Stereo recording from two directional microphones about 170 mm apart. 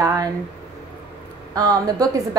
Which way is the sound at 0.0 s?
20° right (ahead or behind).